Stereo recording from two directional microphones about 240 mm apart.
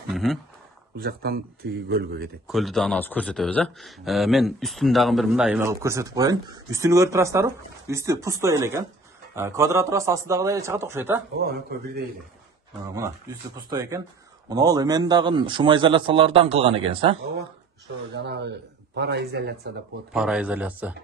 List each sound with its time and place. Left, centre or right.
0.1 s speech: centre
0.9 s speech: right
2.4 s a man's voice: centre
11.3 s speech: right
13.6 s a man's voice: centre
18.1 s a man's voice: right
20.1 s speech: centre